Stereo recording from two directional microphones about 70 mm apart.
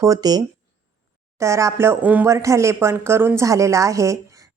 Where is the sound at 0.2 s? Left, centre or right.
Right.